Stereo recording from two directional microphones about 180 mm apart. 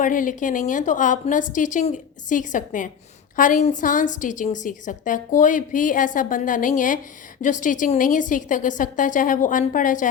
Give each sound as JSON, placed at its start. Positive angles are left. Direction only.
{"t": 0.0, "sound": "a woman's voice", "side_deg": 45}